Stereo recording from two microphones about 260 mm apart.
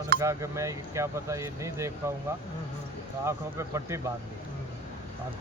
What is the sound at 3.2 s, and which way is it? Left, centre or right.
Speech, centre.